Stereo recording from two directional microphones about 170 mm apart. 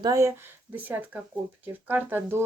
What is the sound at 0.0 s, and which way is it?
A woman's voice, 20° right (ahead or behind).